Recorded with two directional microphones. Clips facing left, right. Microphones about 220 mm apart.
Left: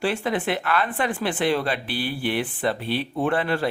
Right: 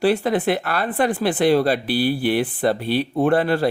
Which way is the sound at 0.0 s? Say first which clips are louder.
Right 6 dB; 40° right (ahead or behind).